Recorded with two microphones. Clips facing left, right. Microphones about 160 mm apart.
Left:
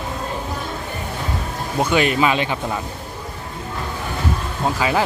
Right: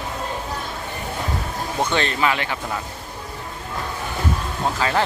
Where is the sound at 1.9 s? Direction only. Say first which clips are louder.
Left 6 dB; 15° left (ahead or behind).